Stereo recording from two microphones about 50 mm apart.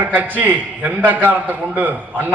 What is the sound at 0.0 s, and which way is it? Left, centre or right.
A man's voice, right.